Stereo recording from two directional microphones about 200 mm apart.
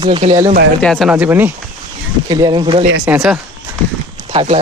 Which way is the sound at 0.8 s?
Centre (ahead or behind).